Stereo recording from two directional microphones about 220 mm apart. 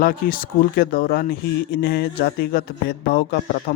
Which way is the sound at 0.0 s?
40° left (ahead or behind).